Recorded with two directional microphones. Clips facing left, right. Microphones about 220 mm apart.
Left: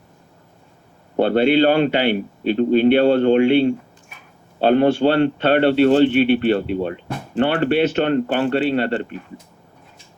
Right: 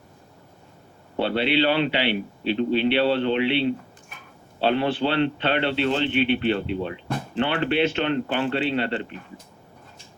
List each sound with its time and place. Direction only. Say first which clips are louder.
1.1 s speech: left 7 dB; 45° left (ahead or behind)